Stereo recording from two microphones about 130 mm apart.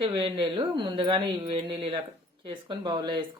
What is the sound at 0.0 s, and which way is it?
A woman's voice, 40° right (ahead or behind).